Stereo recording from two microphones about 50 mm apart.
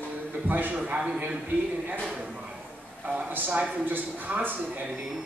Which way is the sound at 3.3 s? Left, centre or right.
Right.